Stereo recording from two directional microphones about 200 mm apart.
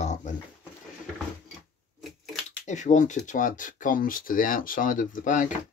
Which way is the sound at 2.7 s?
35° left (ahead or behind).